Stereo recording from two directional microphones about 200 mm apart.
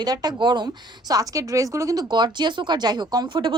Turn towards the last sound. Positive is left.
turn(degrees=-25)  # may be behind; listen again after turning